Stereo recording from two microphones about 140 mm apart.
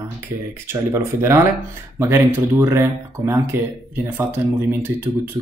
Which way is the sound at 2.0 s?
20° right (ahead or behind).